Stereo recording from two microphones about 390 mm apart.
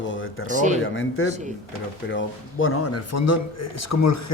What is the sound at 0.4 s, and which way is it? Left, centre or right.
Speech, centre.